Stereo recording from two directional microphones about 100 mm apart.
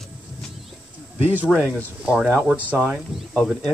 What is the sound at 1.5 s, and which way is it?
Speech, centre (ahead or behind).